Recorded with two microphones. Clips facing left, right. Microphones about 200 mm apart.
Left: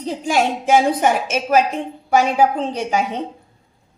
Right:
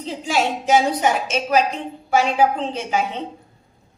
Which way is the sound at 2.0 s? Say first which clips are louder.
Left 2 dB; 45° left (ahead or behind).